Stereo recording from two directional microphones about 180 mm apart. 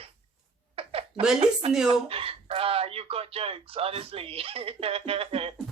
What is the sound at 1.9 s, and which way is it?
Speech, 30° right (ahead or behind).